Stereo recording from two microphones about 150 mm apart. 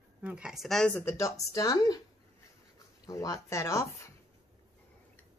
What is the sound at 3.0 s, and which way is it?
Speech, 20° left (ahead or behind).